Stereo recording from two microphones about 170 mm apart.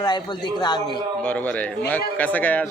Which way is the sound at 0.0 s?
25° left (ahead or behind).